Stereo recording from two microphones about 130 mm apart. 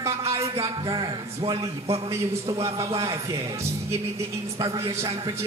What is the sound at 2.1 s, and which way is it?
Music, 25° right (ahead or behind).